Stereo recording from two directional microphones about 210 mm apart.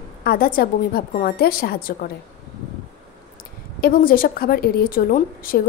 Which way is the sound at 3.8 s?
45° left (ahead or behind).